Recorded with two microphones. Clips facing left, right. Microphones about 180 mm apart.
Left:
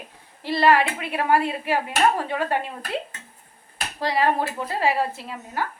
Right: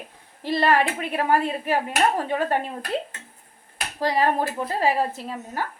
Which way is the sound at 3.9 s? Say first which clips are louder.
Even; 45° right (ahead or behind).